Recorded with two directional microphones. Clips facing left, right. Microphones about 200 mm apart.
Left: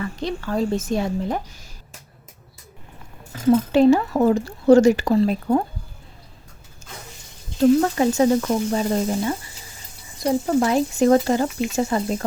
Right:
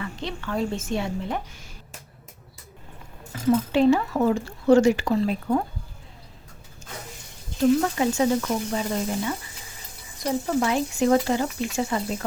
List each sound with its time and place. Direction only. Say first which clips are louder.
0.0 s speech: left 5 dB; 40° left (ahead or behind)
3.7 s speech: left 4 dB; 40° left (ahead or behind)
7.8 s speech: left 4 dB; 40° left (ahead or behind)